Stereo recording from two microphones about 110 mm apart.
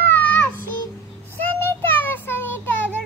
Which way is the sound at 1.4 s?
15° left (ahead or behind).